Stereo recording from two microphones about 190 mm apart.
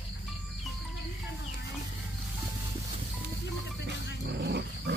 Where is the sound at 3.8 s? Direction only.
60° right (ahead or behind).